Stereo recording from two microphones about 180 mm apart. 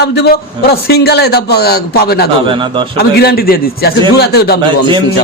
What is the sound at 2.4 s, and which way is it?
Speech, 30° right (ahead or behind).